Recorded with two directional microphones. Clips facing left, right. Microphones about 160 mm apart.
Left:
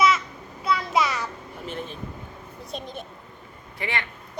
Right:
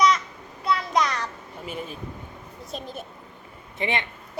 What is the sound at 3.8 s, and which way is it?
Speech, 20° right (ahead or behind).